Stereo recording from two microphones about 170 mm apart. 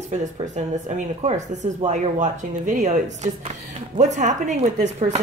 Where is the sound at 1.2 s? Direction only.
40° right (ahead or behind).